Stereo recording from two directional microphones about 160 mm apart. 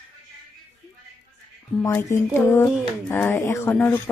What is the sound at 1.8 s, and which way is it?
A woman's voice, 15° left (ahead or behind).